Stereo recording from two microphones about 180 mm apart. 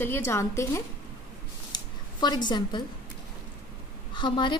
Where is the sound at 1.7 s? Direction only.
25° left (ahead or behind).